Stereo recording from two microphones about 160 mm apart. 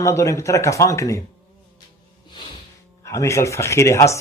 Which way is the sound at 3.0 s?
20° left (ahead or behind).